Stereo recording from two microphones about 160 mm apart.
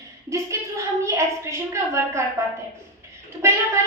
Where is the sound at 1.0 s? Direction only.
15° right (ahead or behind).